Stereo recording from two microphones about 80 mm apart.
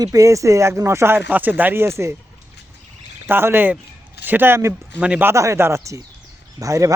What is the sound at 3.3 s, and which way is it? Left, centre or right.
Speech, right.